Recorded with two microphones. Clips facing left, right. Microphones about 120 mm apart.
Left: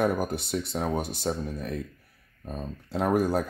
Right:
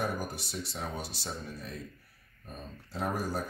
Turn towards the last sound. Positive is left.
turn(degrees=60)  # may be behind; listen again after turning